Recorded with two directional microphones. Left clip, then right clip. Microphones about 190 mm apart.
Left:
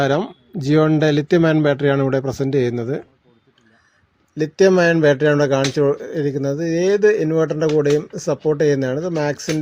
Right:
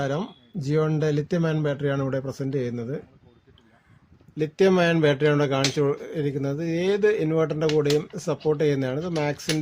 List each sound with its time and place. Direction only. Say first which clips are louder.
0.0 s speech: left 10 dB; 50° left (ahead or behind)
4.4 s speech: left 6 dB; 20° left (ahead or behind)